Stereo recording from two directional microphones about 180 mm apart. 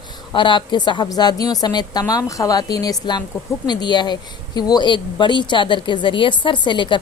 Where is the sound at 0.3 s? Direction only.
25° left (ahead or behind).